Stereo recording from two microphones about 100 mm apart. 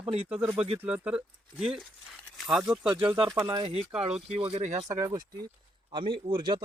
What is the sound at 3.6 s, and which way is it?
Speech, 75° right (ahead or behind).